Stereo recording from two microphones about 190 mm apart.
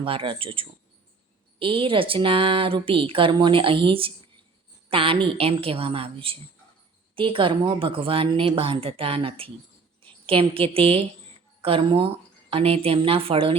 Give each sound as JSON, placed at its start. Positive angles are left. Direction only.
{"t": 0.0, "sound": "a woman's voice", "side_deg": -25}